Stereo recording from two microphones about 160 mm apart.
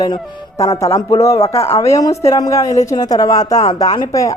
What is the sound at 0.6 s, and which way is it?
A woman's voice, 20° left (ahead or behind).